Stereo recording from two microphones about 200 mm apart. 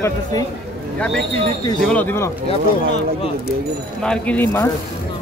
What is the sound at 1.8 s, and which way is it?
Speech, 5° left (ahead or behind).